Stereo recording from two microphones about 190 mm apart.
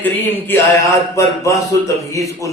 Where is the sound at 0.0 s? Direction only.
10° left (ahead or behind).